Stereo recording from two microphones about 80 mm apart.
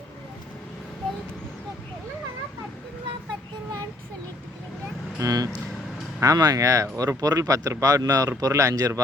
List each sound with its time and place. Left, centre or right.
5.2 s speech: right